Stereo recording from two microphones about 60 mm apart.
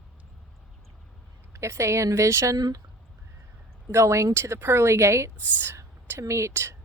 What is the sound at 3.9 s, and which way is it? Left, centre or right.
Speech, right.